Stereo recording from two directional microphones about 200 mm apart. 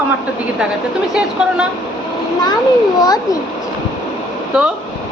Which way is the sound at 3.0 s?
20° left (ahead or behind).